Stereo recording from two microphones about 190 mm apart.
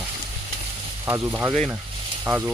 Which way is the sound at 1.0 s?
15° right (ahead or behind).